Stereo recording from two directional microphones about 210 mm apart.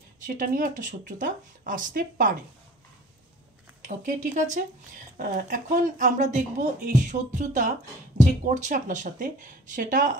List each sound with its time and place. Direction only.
0.2 s a woman's voice: 40° right (ahead or behind)
3.8 s a woman's voice: 40° right (ahead or behind)